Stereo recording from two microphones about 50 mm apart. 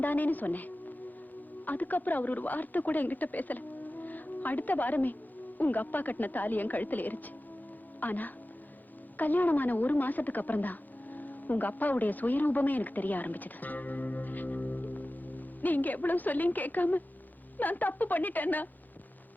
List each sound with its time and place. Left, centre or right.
0.0 s a woman's voice: left